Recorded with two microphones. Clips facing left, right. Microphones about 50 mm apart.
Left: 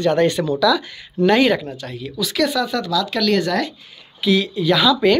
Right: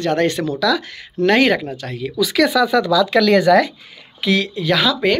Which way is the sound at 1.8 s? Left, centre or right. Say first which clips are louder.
Right 4 dB; right.